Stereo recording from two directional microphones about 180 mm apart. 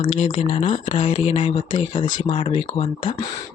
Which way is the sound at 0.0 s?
40° left (ahead or behind).